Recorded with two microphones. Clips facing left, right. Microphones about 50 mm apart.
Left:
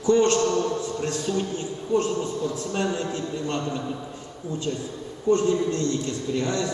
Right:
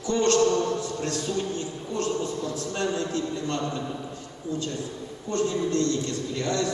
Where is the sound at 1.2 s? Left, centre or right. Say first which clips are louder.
Left 2 dB; centre.